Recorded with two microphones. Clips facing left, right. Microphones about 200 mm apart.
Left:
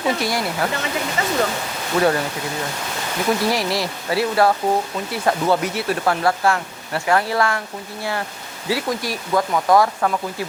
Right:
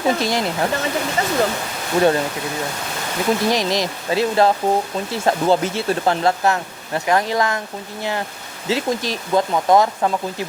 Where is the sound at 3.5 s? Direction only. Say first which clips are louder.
Right 2 dB; 20° right (ahead or behind).